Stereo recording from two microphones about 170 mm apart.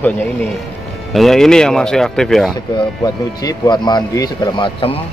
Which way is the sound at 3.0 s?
20° left (ahead or behind).